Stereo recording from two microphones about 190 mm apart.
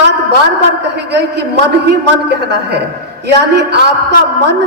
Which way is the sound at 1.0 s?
65° right (ahead or behind).